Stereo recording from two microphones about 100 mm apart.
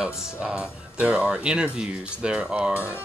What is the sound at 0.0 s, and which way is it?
Speech, 10° right (ahead or behind).